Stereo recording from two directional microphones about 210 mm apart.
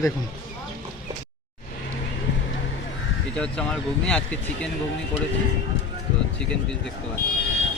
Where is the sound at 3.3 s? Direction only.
5° left (ahead or behind).